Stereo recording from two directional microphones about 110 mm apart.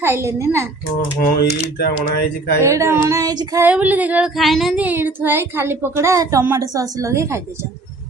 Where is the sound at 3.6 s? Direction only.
15° right (ahead or behind).